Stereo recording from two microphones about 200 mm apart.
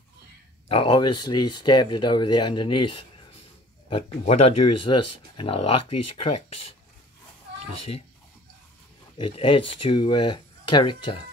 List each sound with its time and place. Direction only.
0.7 s speech: 25° left (ahead or behind)
9.2 s speech: 25° left (ahead or behind)